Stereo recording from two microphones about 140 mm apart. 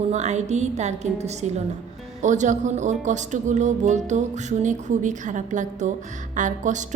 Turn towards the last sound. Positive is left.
turn(degrees=-65)  # may be behind; listen again after turning